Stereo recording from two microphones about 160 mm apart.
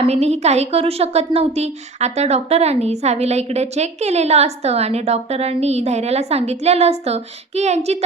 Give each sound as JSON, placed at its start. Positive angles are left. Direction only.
{"t": 0.0, "sound": "a woman's voice", "side_deg": -40}